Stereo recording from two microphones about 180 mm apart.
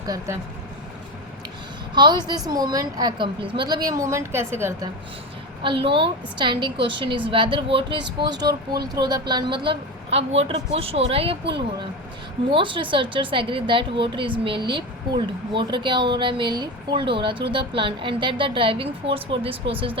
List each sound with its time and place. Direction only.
0.0 s a woman's voice: 20° right (ahead or behind)
2.0 s a woman's voice: 25° right (ahead or behind)
5.9 s a woman's voice: 25° right (ahead or behind)
12.5 s a woman's voice: 30° right (ahead or behind)